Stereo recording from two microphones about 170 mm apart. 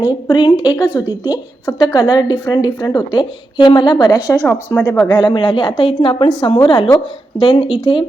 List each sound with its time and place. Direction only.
0.0 s a woman's voice: 25° left (ahead or behind)
4.7 s speech: 10° left (ahead or behind)
5.0 s a woman's voice: 25° left (ahead or behind)